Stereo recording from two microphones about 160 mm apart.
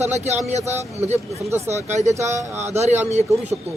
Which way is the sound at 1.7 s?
45° right (ahead or behind).